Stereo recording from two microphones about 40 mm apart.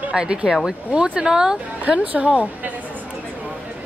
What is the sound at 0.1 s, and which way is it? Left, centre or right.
Speech, right.